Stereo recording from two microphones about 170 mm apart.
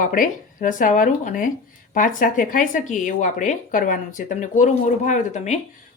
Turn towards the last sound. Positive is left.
turn(degrees=45)  # may be behind; listen again after turning